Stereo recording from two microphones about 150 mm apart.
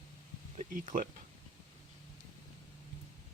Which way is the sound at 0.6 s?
60° right (ahead or behind).